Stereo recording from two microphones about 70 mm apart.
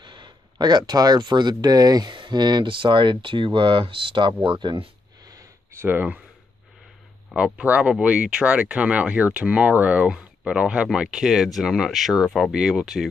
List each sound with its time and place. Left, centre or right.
0.0 s speech: right
4.2 s speech: right
5.8 s speech: right
7.3 s speech: centre